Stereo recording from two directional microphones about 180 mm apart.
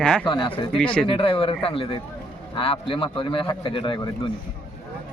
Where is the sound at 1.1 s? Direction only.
30° left (ahead or behind).